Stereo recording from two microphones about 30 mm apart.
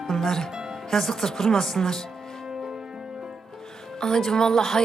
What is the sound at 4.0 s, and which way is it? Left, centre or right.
Speech, centre.